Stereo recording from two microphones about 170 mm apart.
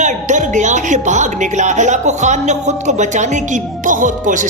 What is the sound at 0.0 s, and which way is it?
Speech, 45° right (ahead or behind).